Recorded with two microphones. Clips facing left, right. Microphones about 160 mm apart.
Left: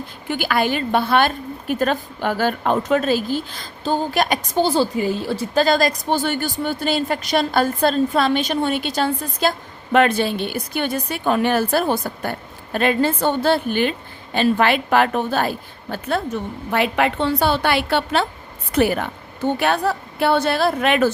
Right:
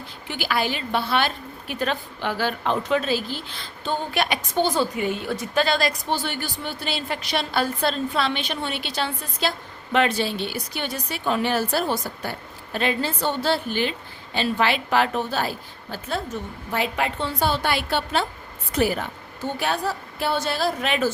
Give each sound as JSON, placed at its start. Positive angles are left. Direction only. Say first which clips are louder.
{"t": 0.3, "sound": "a woman's voice", "louder": "left 5 dB", "side_deg": 50}